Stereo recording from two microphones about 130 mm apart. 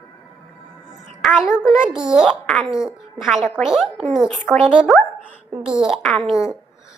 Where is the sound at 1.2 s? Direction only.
5° right (ahead or behind).